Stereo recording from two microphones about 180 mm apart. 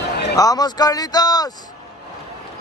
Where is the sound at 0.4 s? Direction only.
20° left (ahead or behind).